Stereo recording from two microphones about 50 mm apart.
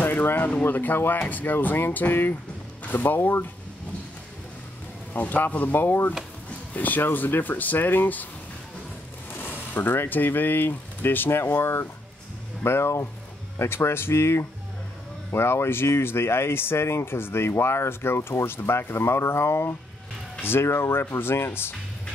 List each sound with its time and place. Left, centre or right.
0.0 s a sound: left
0.7 s speech: left
5.1 s speech: left
9.3 s speech: left